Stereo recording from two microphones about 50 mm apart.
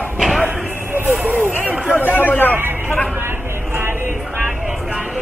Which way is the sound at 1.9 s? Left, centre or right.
Left.